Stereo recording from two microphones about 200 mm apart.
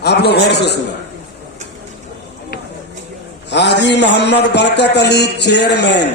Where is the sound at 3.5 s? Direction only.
60° left (ahead or behind).